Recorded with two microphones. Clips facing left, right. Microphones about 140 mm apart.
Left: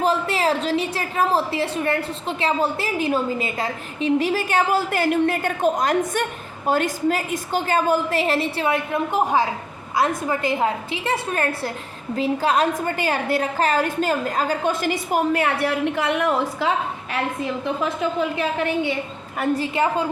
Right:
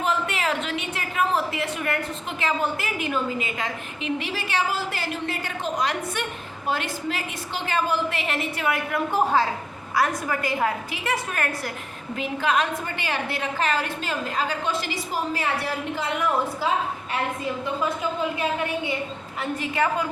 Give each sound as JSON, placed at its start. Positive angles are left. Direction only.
{"t": 0.0, "sound": "a woman's voice", "side_deg": 35}
{"t": 19.7, "sound": "a woman's voice", "side_deg": 25}